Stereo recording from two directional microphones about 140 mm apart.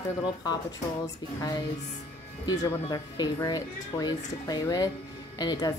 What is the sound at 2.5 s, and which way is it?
Speech, 30° left (ahead or behind).